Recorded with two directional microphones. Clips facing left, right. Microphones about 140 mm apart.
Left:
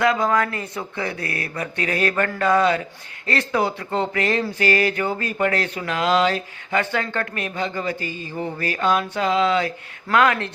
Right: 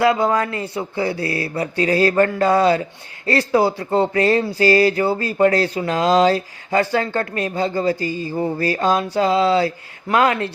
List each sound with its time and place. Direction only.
0.0 s speech: 30° right (ahead or behind)